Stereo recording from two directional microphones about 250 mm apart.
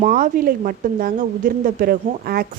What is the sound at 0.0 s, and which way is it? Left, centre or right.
A woman's voice, right.